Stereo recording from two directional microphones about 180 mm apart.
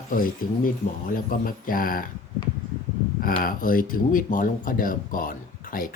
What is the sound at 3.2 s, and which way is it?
Speech, 50° left (ahead or behind).